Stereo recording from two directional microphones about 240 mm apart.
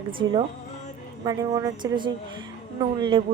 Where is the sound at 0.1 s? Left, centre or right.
Right.